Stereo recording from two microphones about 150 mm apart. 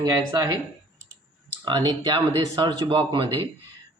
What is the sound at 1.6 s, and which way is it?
Speech, 30° right (ahead or behind).